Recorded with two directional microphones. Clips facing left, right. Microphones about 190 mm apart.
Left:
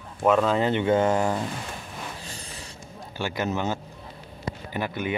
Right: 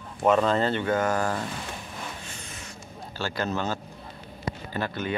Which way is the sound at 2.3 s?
35° left (ahead or behind).